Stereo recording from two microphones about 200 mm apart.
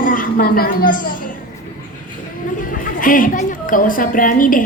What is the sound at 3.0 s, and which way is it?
A woman's voice, 40° left (ahead or behind).